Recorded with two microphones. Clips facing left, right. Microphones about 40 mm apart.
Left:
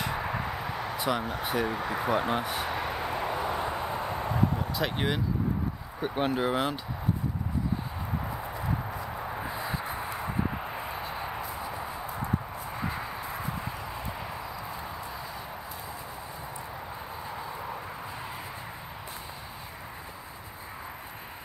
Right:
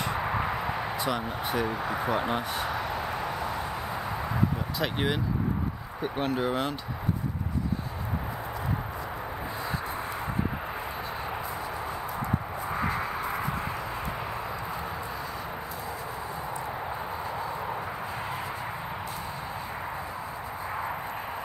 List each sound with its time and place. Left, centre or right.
0.4 s a sound: right
0.9 s speech: centre
3.2 s vehicle: centre
4.0 s a sound: left
4.7 s speech: centre
6.0 s speech: centre